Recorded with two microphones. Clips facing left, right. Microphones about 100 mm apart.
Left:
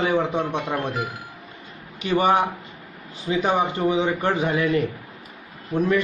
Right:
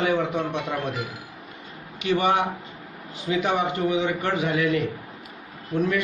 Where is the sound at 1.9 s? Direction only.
35° left (ahead or behind).